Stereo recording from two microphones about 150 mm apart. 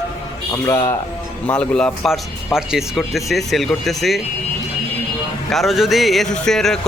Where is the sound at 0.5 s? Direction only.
20° left (ahead or behind).